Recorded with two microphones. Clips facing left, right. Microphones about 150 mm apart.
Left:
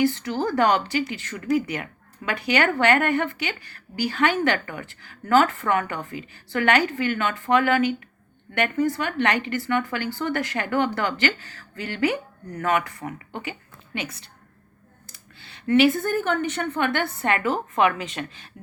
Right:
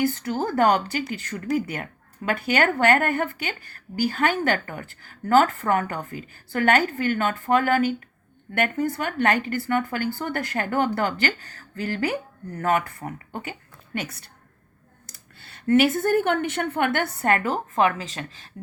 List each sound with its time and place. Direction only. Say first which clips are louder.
0.5 s a woman's voice: right 1 dB; 45° right (ahead or behind)
15.4 s a woman's voice: even; 50° right (ahead or behind); by 18.3 s 35° right (ahead or behind)